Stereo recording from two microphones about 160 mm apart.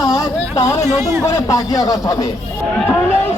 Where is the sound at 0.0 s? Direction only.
25° left (ahead or behind).